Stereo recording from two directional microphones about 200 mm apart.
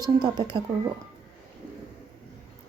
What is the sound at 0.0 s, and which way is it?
Speech, 20° right (ahead or behind).